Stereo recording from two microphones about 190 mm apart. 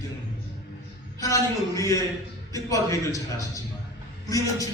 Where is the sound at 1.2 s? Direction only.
15° left (ahead or behind).